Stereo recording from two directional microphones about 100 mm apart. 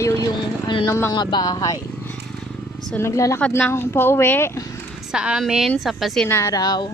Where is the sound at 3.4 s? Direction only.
10° left (ahead or behind).